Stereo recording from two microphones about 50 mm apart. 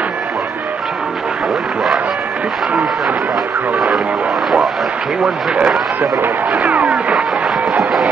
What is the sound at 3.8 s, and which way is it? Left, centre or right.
Radio, centre.